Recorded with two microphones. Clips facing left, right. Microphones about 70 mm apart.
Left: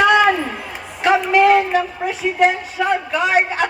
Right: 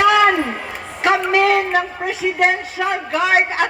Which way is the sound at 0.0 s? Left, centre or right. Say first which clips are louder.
Even; right.